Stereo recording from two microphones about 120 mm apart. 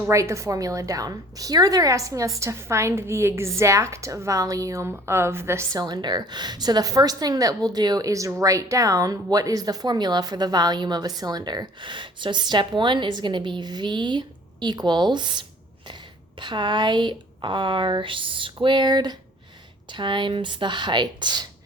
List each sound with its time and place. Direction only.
0.1 s a woman's voice: 25° right (ahead or behind)
5.8 s speech: 35° right (ahead or behind)